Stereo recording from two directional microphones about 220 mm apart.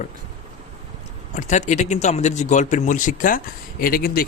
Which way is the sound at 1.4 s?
35° left (ahead or behind).